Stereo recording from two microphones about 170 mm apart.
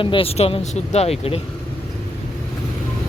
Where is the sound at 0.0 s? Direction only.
30° left (ahead or behind).